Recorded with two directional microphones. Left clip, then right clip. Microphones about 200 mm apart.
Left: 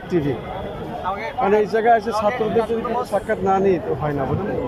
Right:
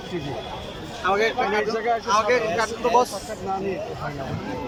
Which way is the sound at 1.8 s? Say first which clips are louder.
Left 8 dB; 25° left (ahead or behind).